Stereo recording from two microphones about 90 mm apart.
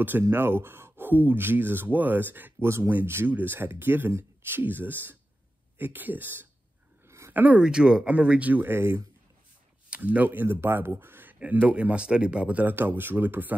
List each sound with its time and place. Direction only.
0.3 s speech: 25° right (ahead or behind)
7.1 s a sound: 30° right (ahead or behind)
7.3 s speech: 15° right (ahead or behind)
9.8 s speech: 15° right (ahead or behind)